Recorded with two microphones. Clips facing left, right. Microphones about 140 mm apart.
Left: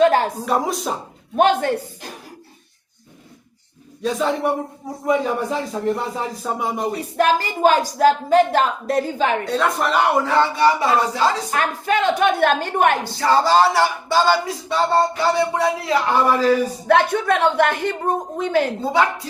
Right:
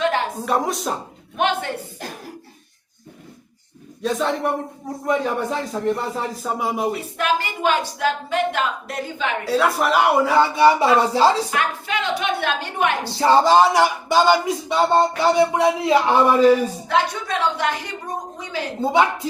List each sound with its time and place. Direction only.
0.3 s speech: centre (ahead or behind)
1.4 s speech: 40° left (ahead or behind)
4.0 s speech: centre (ahead or behind)
7.0 s speech: 40° left (ahead or behind)
9.4 s speech: 5° right (ahead or behind); by 11.4 s 30° right (ahead or behind)
11.5 s a woman's voice: 45° left (ahead or behind)
13.1 s a sound: 25° right (ahead or behind)
16.9 s speech: 60° left (ahead or behind)
18.8 s a sound: 20° right (ahead or behind)